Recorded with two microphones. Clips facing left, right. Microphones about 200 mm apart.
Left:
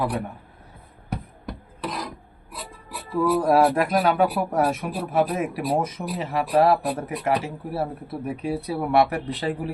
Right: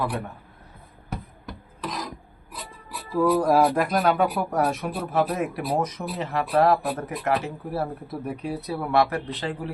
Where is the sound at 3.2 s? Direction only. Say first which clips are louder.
Left 1 dB; 5° left (ahead or behind).